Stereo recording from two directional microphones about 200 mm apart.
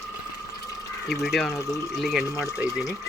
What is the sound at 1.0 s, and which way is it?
Speech, centre (ahead or behind).